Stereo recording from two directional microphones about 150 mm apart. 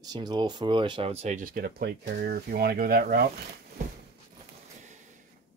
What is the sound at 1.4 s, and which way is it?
Speech, 75° right (ahead or behind).